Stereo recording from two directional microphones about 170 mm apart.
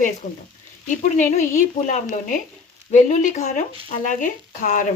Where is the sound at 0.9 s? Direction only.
45° left (ahead or behind).